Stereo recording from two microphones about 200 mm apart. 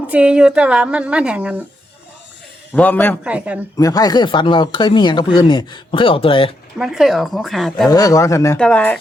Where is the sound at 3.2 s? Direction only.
5° right (ahead or behind).